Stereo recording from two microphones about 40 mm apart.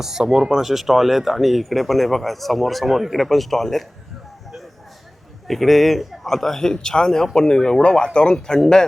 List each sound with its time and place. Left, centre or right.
0.0 s speech: centre
5.5 s speech: centre